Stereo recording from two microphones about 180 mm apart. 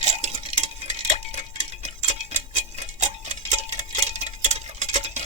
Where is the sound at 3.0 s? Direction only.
40° right (ahead or behind).